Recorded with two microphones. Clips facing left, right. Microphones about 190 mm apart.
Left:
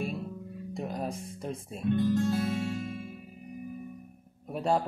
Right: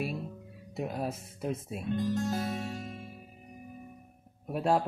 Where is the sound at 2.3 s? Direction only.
35° right (ahead or behind).